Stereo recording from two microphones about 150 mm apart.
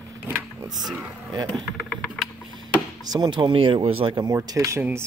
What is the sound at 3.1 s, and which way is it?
Speech, 30° right (ahead or behind).